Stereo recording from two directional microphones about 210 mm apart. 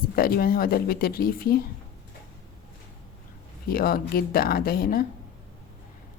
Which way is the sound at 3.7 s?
45° left (ahead or behind).